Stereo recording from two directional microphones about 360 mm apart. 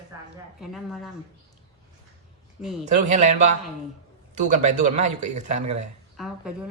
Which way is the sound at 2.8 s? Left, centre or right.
Centre.